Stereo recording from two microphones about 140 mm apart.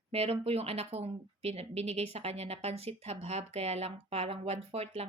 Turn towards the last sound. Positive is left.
turn(degrees=-45)  # may be behind; listen again after turning